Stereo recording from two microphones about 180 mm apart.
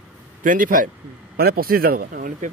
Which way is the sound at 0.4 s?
50° right (ahead or behind).